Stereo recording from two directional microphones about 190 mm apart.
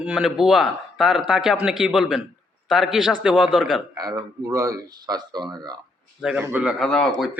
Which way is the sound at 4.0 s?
20° right (ahead or behind).